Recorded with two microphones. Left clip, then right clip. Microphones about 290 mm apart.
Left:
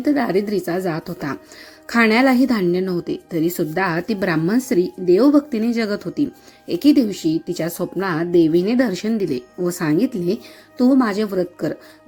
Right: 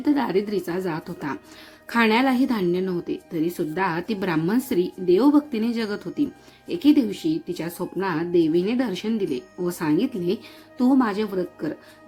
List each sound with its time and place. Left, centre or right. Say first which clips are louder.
0.0 s speech: left 4 dB; centre